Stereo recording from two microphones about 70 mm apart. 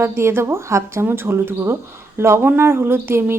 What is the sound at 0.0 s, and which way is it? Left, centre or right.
A woman's voice, right.